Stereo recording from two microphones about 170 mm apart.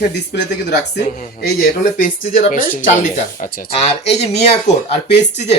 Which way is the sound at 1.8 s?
50° left (ahead or behind).